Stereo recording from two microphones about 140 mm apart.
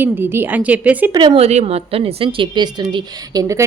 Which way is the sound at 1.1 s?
30° right (ahead or behind).